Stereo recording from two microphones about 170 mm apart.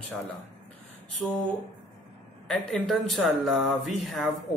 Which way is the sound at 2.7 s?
Centre (ahead or behind).